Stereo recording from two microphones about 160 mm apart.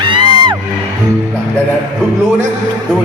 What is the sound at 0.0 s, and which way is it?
Music, 30° right (ahead or behind).